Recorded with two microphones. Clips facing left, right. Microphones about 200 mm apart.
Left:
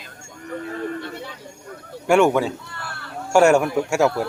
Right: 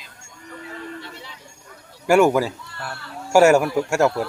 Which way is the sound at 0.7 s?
50° left (ahead or behind).